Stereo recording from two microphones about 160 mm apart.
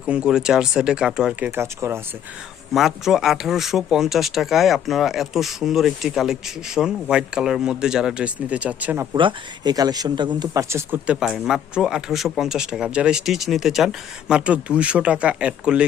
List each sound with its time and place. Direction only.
0.0 s speech: 5° right (ahead or behind)
1.5 s speech: 15° right (ahead or behind)
2.7 s speech: centre (ahead or behind)
9.1 s speech: 30° right (ahead or behind); by 15.8 s 5° right (ahead or behind)